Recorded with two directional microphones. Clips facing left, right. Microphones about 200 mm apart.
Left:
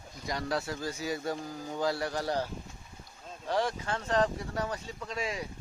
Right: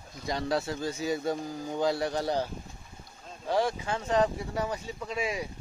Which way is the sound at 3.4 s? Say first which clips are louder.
Right 3 dB; 10° right (ahead or behind).